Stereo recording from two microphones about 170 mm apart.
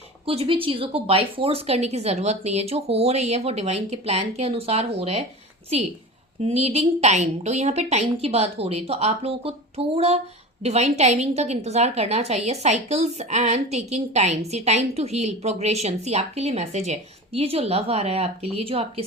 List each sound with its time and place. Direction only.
0.3 s a woman's voice: 30° right (ahead or behind)
6.4 s a woman's voice: 35° right (ahead or behind)